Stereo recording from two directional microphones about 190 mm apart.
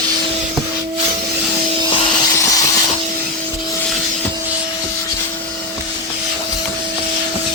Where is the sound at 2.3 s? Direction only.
15° left (ahead or behind).